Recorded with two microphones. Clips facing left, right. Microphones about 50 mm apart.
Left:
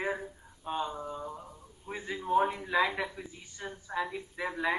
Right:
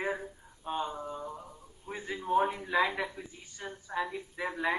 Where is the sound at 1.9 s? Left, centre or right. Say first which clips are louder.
Left 1 dB; centre.